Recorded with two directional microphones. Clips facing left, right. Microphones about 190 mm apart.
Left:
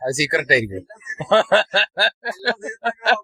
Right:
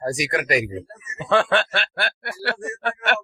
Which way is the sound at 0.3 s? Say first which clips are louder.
Left 2 dB; 30° left (ahead or behind).